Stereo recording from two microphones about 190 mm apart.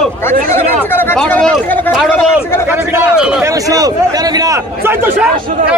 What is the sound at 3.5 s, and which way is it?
A man's voice, 20° right (ahead or behind).